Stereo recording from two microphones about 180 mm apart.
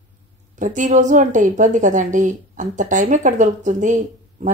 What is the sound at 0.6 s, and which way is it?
A woman's voice, 45° right (ahead or behind).